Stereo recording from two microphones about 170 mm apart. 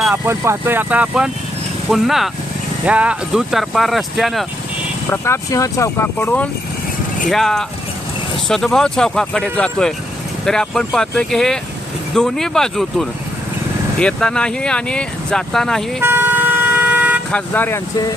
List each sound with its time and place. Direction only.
0.0 s speech: 10° right (ahead or behind)
5.1 s speech: 15° left (ahead or behind)
6.1 s speech: 10° left (ahead or behind)
16.0 s vehicle: 10° right (ahead or behind)
17.3 s speech: 10° left (ahead or behind)